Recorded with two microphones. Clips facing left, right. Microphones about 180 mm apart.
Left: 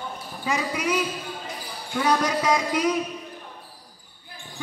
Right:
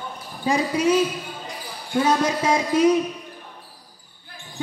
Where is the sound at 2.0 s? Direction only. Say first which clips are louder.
Right 3 dB; 25° right (ahead or behind).